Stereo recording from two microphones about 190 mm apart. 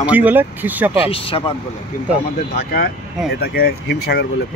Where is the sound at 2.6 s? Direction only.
55° left (ahead or behind).